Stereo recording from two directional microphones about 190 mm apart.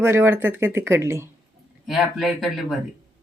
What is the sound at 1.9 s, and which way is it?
Speech, centre (ahead or behind).